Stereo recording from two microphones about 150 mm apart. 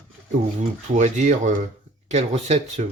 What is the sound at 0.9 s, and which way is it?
Speech, 55° right (ahead or behind).